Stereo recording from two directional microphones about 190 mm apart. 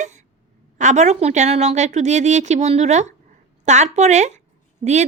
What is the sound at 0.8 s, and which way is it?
A woman's voice, 40° right (ahead or behind).